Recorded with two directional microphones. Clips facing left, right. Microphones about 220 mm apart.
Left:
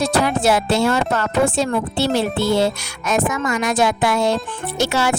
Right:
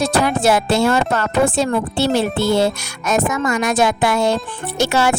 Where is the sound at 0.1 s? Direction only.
50° right (ahead or behind).